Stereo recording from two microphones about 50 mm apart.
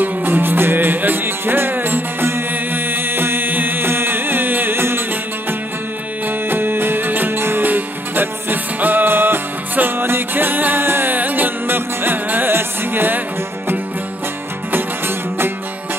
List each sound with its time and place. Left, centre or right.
0.0 s music: right
6.2 s music: right
11.1 s music: right
14.7 s music: right